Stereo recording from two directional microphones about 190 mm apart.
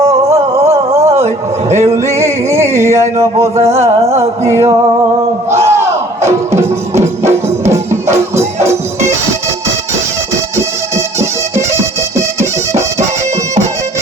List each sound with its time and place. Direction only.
0.5 s a sound: 35° right (ahead or behind)
0.9 s a sound: 15° right (ahead or behind)
1.7 s music: 35° right (ahead or behind)
2.6 s a sound: 35° right (ahead or behind)
2.8 s music: 15° right (ahead or behind)
3.6 s music: 35° right (ahead or behind)
4.2 s music: 15° right (ahead or behind)
8.1 s music: 35° right (ahead or behind)
11.2 s music: 15° right (ahead or behind)